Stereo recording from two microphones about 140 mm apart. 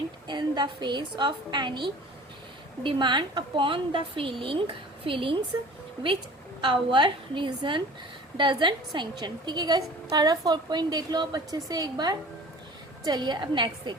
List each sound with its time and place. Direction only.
0.3 s a woman's voice: 30° right (ahead or behind)
2.8 s a woman's voice: 35° right (ahead or behind)
6.6 s a woman's voice: 35° right (ahead or behind)